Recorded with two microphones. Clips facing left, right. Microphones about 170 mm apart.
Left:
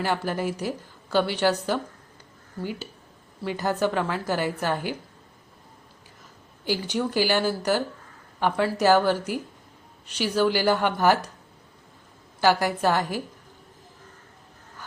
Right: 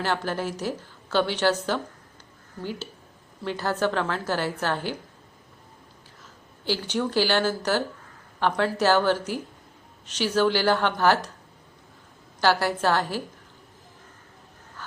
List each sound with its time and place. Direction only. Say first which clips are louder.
0.0 s speech: left 1 dB; 10° left (ahead or behind)
3.4 s speech: left 1 dB; 10° left (ahead or behind)
6.7 s speech: even; 10° left (ahead or behind)
12.4 s speech: left 1 dB; 15° left (ahead or behind)
14.8 s vehicle: right 1 dB; 15° left (ahead or behind)